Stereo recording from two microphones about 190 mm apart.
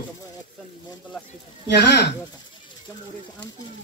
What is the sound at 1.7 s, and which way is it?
Speech, 60° left (ahead or behind).